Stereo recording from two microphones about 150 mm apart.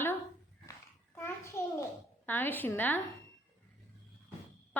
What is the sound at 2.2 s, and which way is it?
Speech, 10° left (ahead or behind).